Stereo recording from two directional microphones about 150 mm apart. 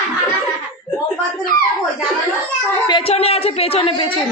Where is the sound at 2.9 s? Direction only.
35° left (ahead or behind).